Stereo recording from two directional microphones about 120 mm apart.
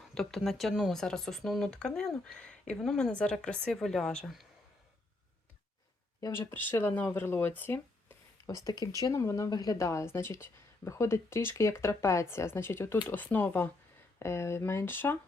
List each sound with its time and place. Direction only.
0.1 s speech: 5° left (ahead or behind)
6.1 s speech: 20° left (ahead or behind)
8.4 s speech: 30° left (ahead or behind)